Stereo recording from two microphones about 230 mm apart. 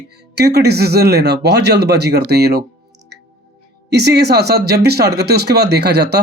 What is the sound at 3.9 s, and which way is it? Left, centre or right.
Speech, right.